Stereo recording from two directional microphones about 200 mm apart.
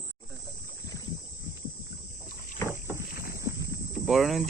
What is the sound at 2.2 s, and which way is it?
Boat, 45° left (ahead or behind).